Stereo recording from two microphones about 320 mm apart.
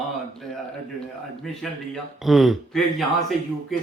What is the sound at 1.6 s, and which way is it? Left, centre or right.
A man's voice, centre.